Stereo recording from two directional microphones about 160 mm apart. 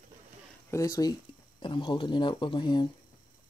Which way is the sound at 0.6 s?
20° left (ahead or behind).